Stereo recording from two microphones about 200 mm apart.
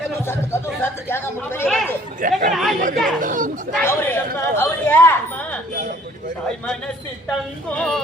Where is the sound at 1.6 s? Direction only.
Centre (ahead or behind).